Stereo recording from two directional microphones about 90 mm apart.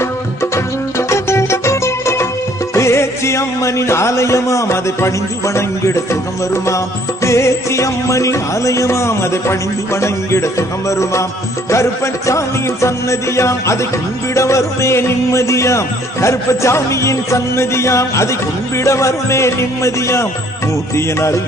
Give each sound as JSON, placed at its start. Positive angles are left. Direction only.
{"t": 0.5, "sound": "music", "side_deg": 30}